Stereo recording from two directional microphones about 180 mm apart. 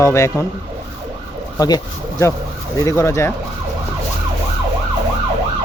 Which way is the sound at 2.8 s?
15° left (ahead or behind).